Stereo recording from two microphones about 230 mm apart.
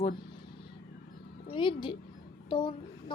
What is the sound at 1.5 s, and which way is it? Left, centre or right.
A woman's voice, left.